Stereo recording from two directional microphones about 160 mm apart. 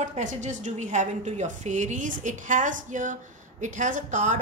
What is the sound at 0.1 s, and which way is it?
A woman's voice, 50° right (ahead or behind).